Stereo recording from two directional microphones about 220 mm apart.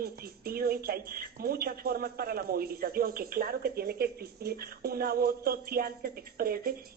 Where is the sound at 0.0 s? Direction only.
45° right (ahead or behind).